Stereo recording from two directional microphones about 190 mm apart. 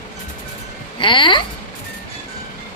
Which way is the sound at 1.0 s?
25° left (ahead or behind).